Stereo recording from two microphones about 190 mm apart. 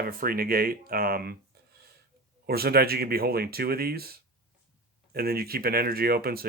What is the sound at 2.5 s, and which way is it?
Speech, 55° right (ahead or behind).